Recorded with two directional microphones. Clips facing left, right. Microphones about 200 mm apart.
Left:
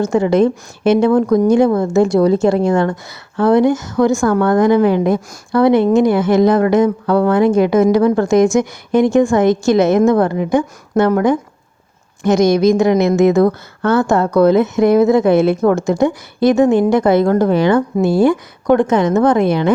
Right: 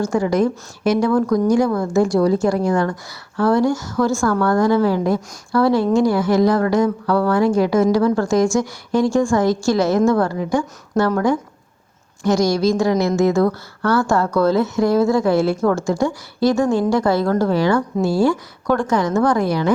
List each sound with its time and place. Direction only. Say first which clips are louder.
0.0 s a woman's voice: left 5 dB; 25° left (ahead or behind)